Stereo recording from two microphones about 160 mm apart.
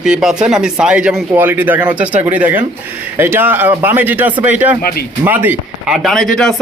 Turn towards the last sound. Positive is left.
turn(degrees=0)  # may be behind; listen again after turning